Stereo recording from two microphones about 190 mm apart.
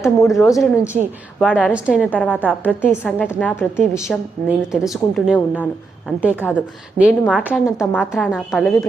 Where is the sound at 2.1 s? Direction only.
5° left (ahead or behind).